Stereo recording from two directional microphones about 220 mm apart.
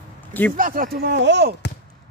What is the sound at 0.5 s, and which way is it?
Speech, 40° right (ahead or behind).